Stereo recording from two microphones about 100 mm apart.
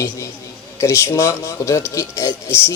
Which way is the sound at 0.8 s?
30° left (ahead or behind).